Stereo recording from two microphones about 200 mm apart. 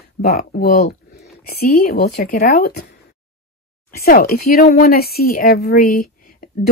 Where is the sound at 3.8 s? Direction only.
45° left (ahead or behind).